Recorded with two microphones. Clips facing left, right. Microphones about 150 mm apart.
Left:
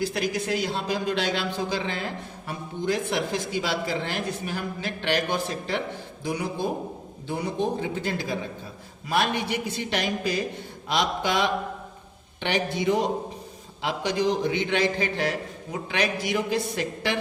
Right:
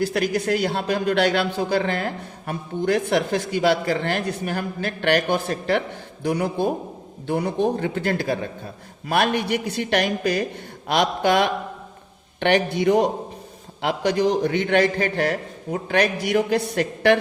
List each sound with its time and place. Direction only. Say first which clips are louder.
0.0 s a man's voice: right 5 dB; 60° right (ahead or behind)